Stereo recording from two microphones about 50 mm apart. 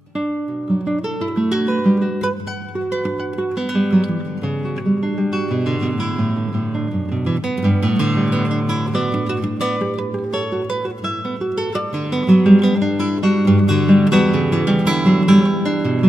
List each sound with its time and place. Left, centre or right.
0.8 s guitar: centre
3.7 s music: centre
5.2 s music: centre
7.2 s music: centre
12.3 s music: centre
15.3 s music: centre
15.8 s guitar: centre